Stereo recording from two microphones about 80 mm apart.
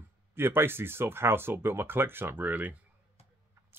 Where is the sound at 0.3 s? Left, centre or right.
Right.